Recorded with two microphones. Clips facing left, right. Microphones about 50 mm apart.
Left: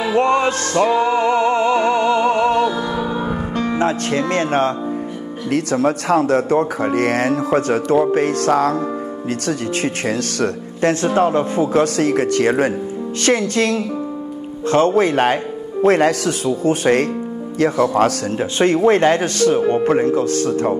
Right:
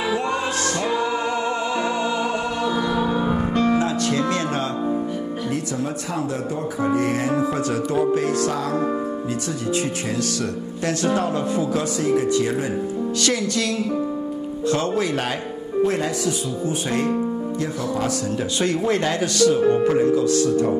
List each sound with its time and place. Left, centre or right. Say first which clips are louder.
0.1 s music: left 7 dB; left
2.7 s music: even; centre
3.7 s speech: left 2 dB; left
5.5 s speech: left 12 dB; left
10.9 s speech: left 6 dB; left
12.0 s speech: left 4 dB; left
13.2 s speech: left 8 dB; left
15.8 s speech: left 7 dB; left
18.4 s speech: left 9 dB; left